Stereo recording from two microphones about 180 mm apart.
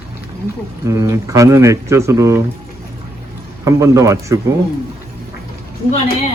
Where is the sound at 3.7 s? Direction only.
15° right (ahead or behind).